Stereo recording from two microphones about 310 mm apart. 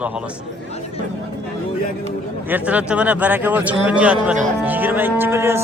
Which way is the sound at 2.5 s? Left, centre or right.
Centre.